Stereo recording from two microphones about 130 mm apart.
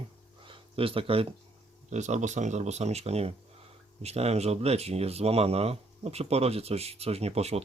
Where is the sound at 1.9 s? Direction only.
65° right (ahead or behind).